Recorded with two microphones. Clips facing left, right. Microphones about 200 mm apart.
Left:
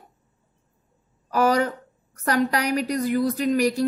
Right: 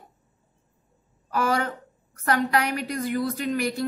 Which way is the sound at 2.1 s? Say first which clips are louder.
Left 1 dB; 40° left (ahead or behind).